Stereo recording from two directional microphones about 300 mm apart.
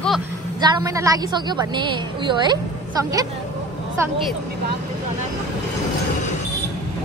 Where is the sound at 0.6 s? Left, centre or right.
Centre.